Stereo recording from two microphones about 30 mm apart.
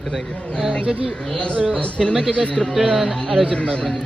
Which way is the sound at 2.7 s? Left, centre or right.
Right.